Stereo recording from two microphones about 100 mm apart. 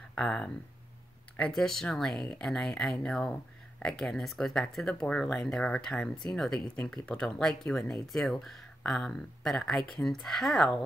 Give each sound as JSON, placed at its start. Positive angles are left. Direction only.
{"t": 0.1, "sound": "speech", "side_deg": 10}
{"t": 1.5, "sound": "speech", "side_deg": 5}